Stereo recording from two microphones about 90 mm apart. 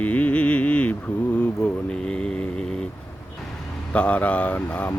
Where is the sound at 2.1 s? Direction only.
10° left (ahead or behind).